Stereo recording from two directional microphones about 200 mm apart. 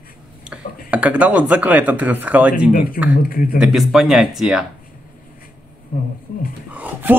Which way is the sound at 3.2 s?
45° left (ahead or behind).